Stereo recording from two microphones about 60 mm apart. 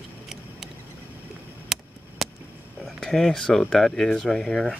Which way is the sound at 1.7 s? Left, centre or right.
Centre.